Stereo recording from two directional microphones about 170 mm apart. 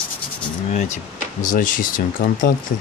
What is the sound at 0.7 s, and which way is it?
Speech, 45° left (ahead or behind).